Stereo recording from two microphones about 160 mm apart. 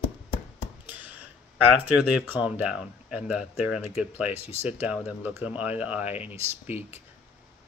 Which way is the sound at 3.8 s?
40° left (ahead or behind).